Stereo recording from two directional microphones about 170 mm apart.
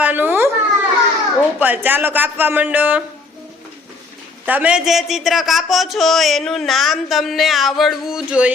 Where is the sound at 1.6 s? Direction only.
10° right (ahead or behind).